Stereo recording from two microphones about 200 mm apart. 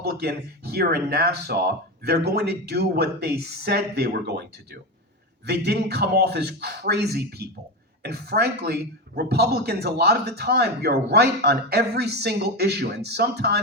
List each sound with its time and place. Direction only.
0.0 s a man's voice: 50° right (ahead or behind)